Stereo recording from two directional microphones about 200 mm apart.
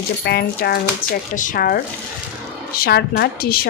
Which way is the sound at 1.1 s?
45° left (ahead or behind).